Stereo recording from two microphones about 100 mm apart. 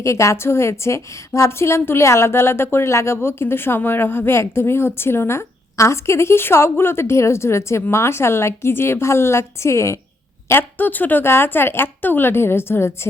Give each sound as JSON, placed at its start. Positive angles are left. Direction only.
{"t": 0.0, "sound": "a woman's voice", "side_deg": 30}